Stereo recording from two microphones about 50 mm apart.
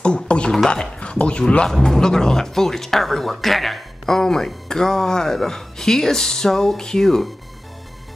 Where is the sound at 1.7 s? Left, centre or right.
Centre.